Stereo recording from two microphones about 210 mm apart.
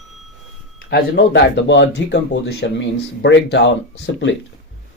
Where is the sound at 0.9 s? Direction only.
50° left (ahead or behind).